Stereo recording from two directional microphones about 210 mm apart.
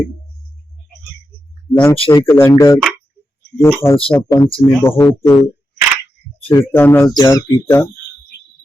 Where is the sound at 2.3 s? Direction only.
10° left (ahead or behind).